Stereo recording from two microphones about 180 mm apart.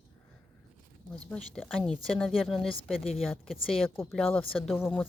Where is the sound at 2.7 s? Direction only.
35° left (ahead or behind).